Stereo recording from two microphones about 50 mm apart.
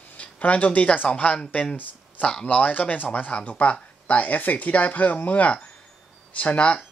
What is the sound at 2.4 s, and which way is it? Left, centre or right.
Speech, left.